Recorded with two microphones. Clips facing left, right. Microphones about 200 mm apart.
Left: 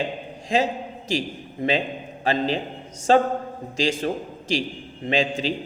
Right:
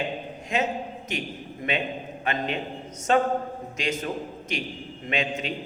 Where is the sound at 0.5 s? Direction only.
30° left (ahead or behind).